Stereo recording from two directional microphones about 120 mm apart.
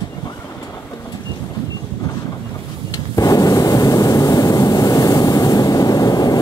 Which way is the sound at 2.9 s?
30° left (ahead or behind).